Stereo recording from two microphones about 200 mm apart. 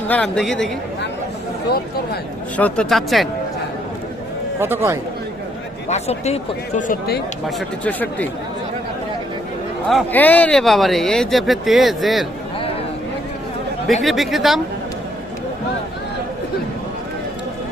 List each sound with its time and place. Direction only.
0.1 s speech: 5° left (ahead or behind)
2.6 s speech: 5° left (ahead or behind)
4.6 s speech: 10° right (ahead or behind)
5.9 s speech: 30° left (ahead or behind)
7.4 s speech: 10° left (ahead or behind)
9.9 s speech: 10° left (ahead or behind)
14.0 s speech: centre (ahead or behind)